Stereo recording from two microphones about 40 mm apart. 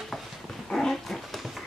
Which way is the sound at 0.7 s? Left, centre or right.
Centre.